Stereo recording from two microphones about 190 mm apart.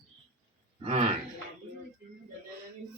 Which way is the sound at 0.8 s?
35° right (ahead or behind).